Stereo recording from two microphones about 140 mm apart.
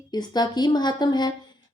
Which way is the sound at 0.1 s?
30° left (ahead or behind).